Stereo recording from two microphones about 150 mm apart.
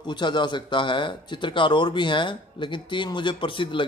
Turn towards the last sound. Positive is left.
turn(degrees=35)  # may be behind; listen again after turning